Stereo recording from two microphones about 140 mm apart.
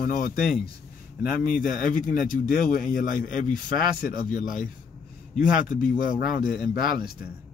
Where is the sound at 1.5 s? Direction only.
75° left (ahead or behind); by 6.9 s 90° left.